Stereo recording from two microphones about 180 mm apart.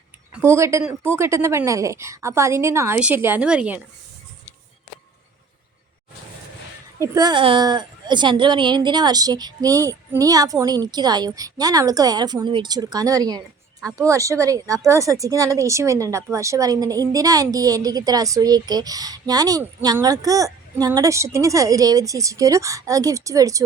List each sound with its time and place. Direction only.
0.3 s speech: 15° right (ahead or behind)
7.0 s speech: 20° right (ahead or behind)